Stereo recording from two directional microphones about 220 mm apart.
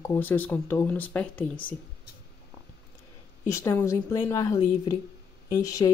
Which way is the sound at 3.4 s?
15° left (ahead or behind).